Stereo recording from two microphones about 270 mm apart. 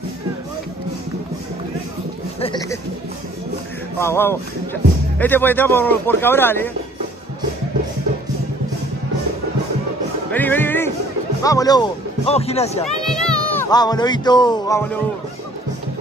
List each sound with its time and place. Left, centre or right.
2.4 s speech: centre
4.0 s speech: centre
10.3 s speech: centre; by 12.8 s left
12.8 s a sound: centre
13.7 s speech: centre